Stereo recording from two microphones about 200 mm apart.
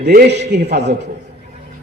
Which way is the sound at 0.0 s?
50° right (ahead or behind).